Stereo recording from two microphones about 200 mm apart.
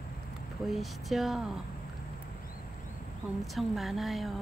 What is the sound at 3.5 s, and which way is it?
Speech, centre (ahead or behind).